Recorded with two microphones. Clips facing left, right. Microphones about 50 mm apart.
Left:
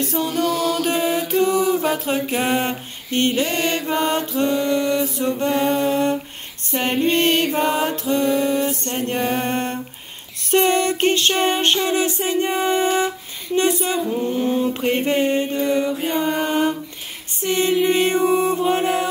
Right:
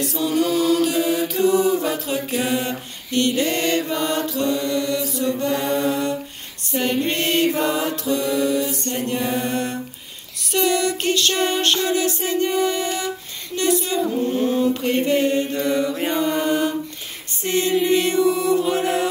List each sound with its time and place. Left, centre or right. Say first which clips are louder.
0.0 s chant: even; left
0.7 s mantra: right 1 dB; left
10.5 s music: left 3 dB; left
13.6 s mantra: left 1 dB; left
17.8 s music: even; left